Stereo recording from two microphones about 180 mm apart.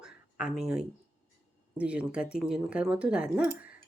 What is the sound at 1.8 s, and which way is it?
Speech, 5° right (ahead or behind).